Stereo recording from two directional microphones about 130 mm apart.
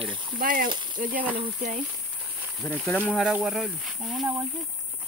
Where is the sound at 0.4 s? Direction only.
90° right.